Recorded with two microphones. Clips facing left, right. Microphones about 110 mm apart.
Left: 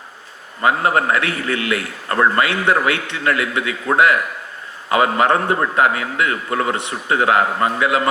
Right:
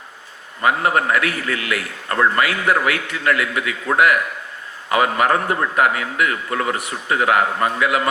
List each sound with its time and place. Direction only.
0.6 s a man's voice: 25° left (ahead or behind)